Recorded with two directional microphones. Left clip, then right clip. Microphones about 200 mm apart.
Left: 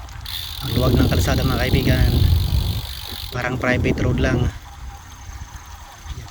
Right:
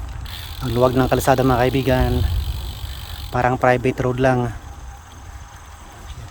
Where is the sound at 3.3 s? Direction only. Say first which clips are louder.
Right 5 dB; 25° right (ahead or behind).